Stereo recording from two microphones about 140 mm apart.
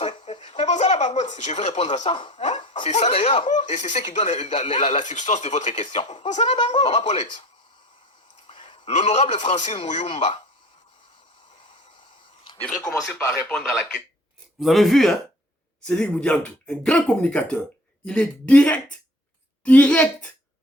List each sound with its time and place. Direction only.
0.0 s a sound: 45° left (ahead or behind)
0.5 s speech: 55° left (ahead or behind)
2.0 s speech: 40° left (ahead or behind)
2.3 s speech: 55° left (ahead or behind)
8.4 s a man's voice: 40° left (ahead or behind)
13.1 s a man's voice: 20° left (ahead or behind)
13.5 s speech: centre (ahead or behind)